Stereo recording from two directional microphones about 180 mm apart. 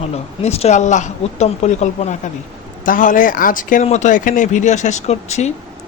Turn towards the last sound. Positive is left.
turn(degrees=40)  # may be behind; listen again after turning